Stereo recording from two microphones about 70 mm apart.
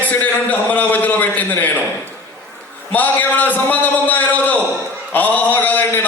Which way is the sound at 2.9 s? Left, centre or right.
Left.